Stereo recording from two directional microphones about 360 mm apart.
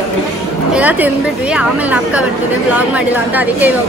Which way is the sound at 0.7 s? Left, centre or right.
Centre.